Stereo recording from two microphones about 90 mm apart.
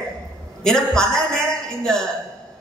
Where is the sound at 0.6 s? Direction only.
5° left (ahead or behind).